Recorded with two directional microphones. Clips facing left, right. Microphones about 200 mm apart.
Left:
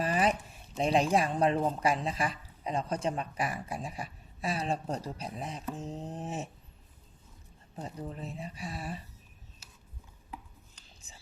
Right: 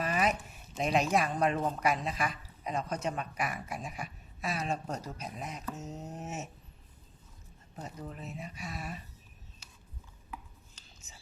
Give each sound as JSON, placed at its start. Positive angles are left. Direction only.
{"t": 0.0, "sound": "a sound", "side_deg": 30}
{"t": 1.8, "sound": "speech", "side_deg": 30}
{"t": 7.8, "sound": "speech", "side_deg": 30}